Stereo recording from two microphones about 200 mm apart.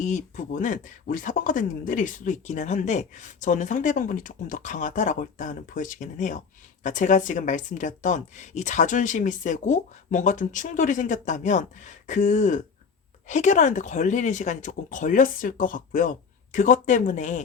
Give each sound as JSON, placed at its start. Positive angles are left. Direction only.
{"t": 0.0, "sound": "speech", "side_deg": 40}